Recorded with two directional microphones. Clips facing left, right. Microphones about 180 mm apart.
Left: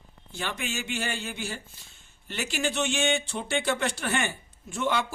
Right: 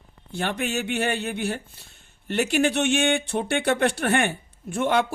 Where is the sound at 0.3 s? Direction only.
60° right (ahead or behind).